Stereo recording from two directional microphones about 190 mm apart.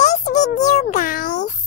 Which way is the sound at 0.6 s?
40° left (ahead or behind).